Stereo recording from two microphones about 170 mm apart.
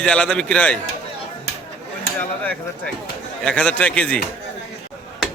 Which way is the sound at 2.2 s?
10° left (ahead or behind).